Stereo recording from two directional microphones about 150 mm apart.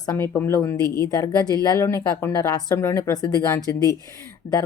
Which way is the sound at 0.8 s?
25° right (ahead or behind).